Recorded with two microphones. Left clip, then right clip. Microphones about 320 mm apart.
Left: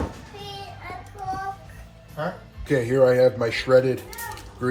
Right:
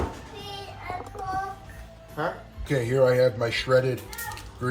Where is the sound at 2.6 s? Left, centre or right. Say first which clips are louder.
Left 3 dB; centre.